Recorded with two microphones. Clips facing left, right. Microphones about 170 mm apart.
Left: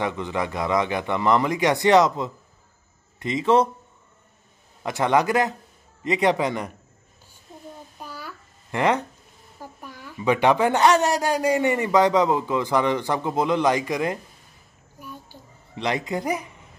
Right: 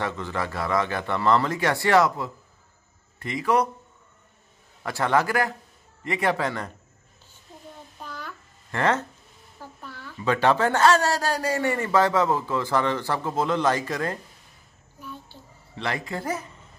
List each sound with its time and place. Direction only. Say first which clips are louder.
0.0 s a man's voice: left 3 dB; 15° left (ahead or behind)
4.8 s a man's voice: left 3 dB; 20° left (ahead or behind)
8.0 s babbling: even; 10° left (ahead or behind)
9.6 s speech: left 1 dB; 15° left (ahead or behind)
15.0 s a sound: even; 10° left (ahead or behind)